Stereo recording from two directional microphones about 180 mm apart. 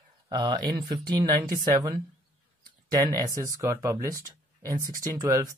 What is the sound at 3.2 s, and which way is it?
Speech, 20° right (ahead or behind).